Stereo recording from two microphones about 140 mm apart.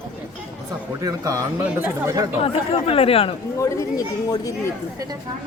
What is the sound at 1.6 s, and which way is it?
Speech, 15° right (ahead or behind).